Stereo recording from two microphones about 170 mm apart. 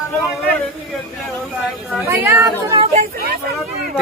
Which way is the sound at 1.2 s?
Centre (ahead or behind).